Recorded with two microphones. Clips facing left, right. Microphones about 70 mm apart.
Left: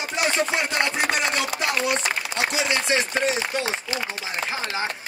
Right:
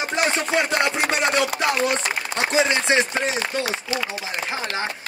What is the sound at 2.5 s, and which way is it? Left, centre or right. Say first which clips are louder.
Speech: right 7 dB; right.